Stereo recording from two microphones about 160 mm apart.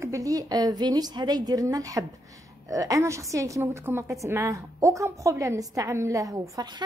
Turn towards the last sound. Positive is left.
turn(degrees=-20)  # may be behind; listen again after turning